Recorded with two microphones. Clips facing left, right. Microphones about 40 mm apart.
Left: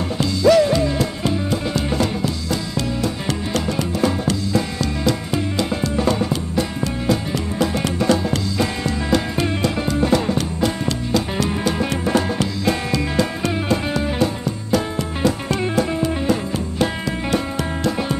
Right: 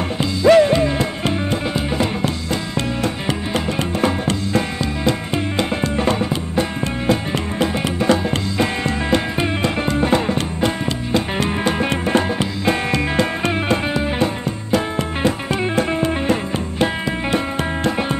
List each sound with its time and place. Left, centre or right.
0.2 s music: right
1.7 s music: right
2.2 s music: right
15.8 s music: right
16.7 s music: right